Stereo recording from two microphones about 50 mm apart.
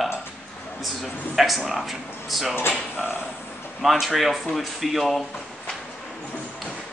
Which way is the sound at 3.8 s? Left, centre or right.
Centre.